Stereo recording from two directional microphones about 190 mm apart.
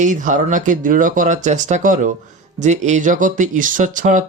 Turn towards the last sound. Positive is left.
turn(degrees=-40)  # may be behind; listen again after turning